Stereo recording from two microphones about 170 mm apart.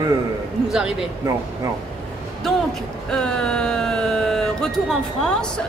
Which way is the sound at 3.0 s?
5° left (ahead or behind).